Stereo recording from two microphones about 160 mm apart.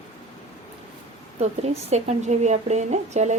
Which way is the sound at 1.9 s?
45° right (ahead or behind).